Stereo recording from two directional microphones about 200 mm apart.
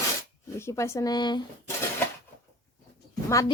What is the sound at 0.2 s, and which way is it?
Speech, 15° left (ahead or behind).